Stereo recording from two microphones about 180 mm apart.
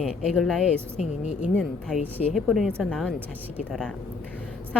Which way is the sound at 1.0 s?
40° left (ahead or behind).